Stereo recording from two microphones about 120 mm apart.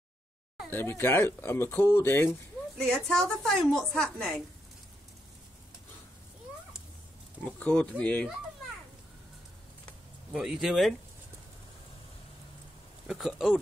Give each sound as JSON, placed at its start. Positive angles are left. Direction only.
{"t": 0.7, "sound": "speech", "side_deg": 20}
{"t": 2.8, "sound": "a woman's voice", "side_deg": 5}
{"t": 7.4, "sound": "speech", "side_deg": 5}
{"t": 10.3, "sound": "a woman's voice", "side_deg": -5}
{"t": 13.0, "sound": "a woman's voice", "side_deg": -5}